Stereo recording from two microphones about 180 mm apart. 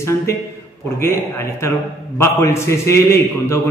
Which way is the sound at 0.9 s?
15° left (ahead or behind).